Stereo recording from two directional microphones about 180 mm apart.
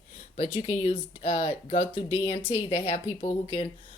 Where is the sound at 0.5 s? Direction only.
35° left (ahead or behind).